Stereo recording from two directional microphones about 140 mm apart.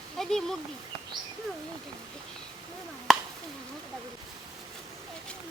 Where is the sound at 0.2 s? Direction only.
5° left (ahead or behind).